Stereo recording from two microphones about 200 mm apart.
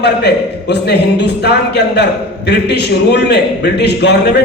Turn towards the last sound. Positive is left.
turn(degrees=55)  # may be behind; listen again after turning